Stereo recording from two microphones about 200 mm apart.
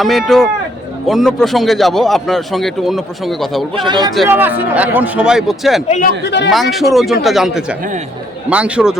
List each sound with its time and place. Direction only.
0.0 s speech: centre (ahead or behind)
3.8 s speech: 25° right (ahead or behind)
4.3 s speech: 10° right (ahead or behind)
5.9 s speech: 45° left (ahead or behind)
6.5 s speech: centre (ahead or behind)